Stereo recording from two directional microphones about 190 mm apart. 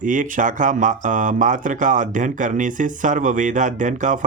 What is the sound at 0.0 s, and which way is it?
Speech, 45° right (ahead or behind).